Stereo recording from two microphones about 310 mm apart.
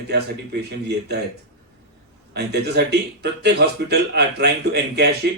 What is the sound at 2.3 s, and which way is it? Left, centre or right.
Speech, right.